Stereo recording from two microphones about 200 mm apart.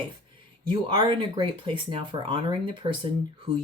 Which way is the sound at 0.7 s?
25° right (ahead or behind).